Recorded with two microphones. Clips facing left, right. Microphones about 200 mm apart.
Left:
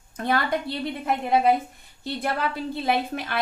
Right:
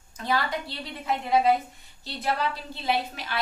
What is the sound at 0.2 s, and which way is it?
A woman's voice, 55° left (ahead or behind).